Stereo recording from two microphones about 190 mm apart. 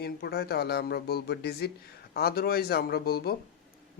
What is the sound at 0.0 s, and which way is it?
A man's voice, 55° left (ahead or behind).